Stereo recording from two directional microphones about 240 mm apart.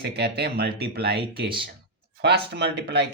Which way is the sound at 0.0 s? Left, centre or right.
Right.